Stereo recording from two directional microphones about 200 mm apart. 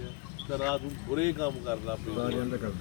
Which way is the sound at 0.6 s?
15° left (ahead or behind).